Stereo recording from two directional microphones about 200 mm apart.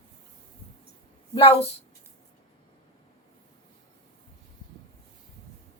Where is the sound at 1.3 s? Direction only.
30° left (ahead or behind).